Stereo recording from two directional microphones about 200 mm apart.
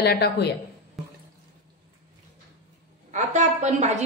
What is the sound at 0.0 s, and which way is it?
Speech, 55° left (ahead or behind).